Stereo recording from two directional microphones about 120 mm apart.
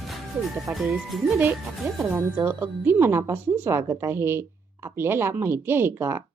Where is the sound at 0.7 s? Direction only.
20° right (ahead or behind).